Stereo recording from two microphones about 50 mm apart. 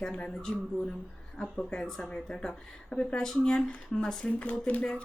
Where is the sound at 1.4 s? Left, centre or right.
Centre.